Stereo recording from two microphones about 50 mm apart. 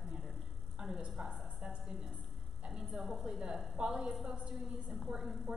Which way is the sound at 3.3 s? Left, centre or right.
Centre.